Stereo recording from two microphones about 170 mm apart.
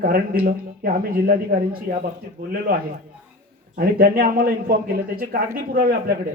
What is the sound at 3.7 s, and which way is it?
A man's voice, 60° right (ahead or behind).